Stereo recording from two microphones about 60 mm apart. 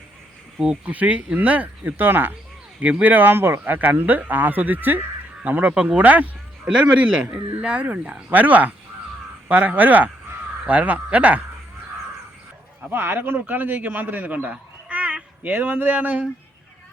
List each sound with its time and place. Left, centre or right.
0.6 s speech: right
12.9 s a man's voice: right